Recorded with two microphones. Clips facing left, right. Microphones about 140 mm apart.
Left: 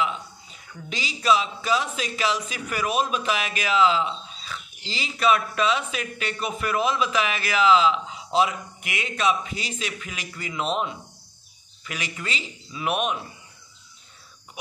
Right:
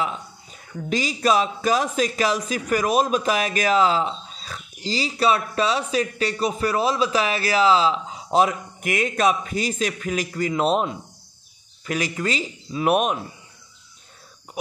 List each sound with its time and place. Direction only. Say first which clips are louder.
0.0 s a man's voice: even; 45° right (ahead or behind)